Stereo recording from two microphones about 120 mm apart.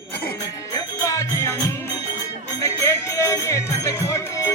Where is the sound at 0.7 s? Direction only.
25° left (ahead or behind).